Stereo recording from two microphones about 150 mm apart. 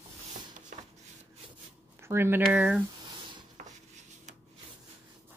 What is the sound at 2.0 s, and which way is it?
Speech, 15° right (ahead or behind).